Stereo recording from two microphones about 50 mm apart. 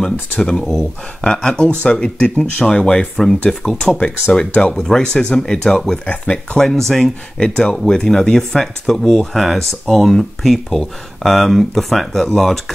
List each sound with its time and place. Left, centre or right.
0.0 s speech: centre
6.0 s speech: left
6.6 s speech: centre
7.3 s speech: centre
9.2 s speech: centre